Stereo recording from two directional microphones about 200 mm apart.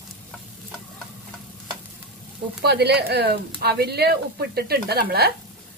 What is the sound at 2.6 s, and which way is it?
Speech, 55° right (ahead or behind).